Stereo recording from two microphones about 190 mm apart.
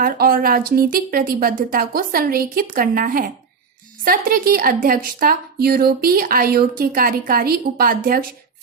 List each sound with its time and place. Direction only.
0.0 s a woman's voice: 50° right (ahead or behind)